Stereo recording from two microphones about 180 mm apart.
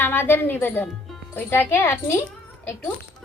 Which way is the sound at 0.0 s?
10° left (ahead or behind).